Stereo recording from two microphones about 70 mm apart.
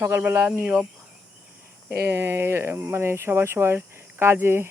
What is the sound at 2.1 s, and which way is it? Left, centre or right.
Speech, right.